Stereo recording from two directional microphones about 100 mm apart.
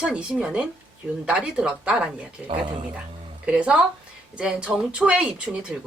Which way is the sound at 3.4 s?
10° right (ahead or behind).